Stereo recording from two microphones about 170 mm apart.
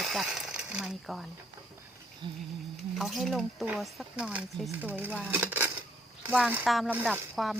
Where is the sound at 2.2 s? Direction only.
30° right (ahead or behind).